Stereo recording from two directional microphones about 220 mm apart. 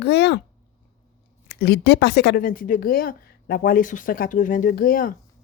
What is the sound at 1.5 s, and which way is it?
Speech, 50° left (ahead or behind).